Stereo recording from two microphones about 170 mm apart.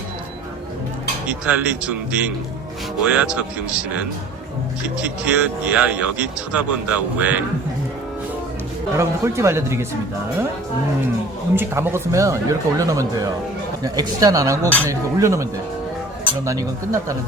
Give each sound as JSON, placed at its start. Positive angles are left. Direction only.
{"t": 1.3, "sound": "speech", "side_deg": -10}
{"t": 5.0, "sound": "speech", "side_deg": -10}
{"t": 9.0, "sound": "speech", "side_deg": -15}
{"t": 11.5, "sound": "speech", "side_deg": -15}
{"t": 16.5, "sound": "speech", "side_deg": -20}